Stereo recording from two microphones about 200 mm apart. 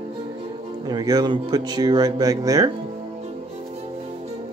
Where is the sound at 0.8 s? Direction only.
20° right (ahead or behind).